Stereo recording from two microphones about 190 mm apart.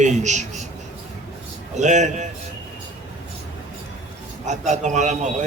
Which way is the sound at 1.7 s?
40° right (ahead or behind).